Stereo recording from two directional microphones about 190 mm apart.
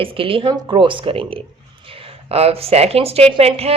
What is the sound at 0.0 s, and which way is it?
Speech, 30° right (ahead or behind).